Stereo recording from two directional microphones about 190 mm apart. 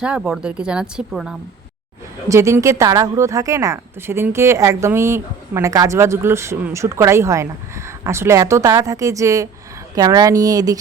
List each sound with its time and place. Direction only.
0.0 s speech: 5° right (ahead or behind)
2.2 s speech: 15° right (ahead or behind)